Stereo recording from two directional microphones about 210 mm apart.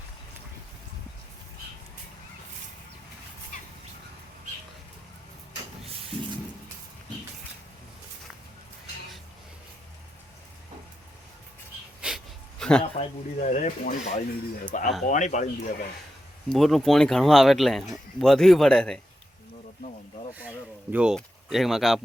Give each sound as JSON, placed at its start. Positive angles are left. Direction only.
{"t": 12.0, "sound": "a sound", "side_deg": 0}
{"t": 12.8, "sound": "a man's voice", "side_deg": 25}
{"t": 16.5, "sound": "speech", "side_deg": 0}
{"t": 20.4, "sound": "speech", "side_deg": -5}